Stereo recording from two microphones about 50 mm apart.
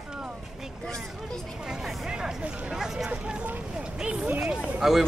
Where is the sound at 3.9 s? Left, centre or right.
Centre.